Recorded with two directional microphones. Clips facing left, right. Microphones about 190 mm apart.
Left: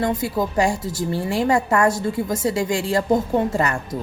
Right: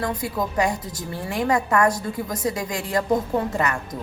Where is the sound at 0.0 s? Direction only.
25° left (ahead or behind).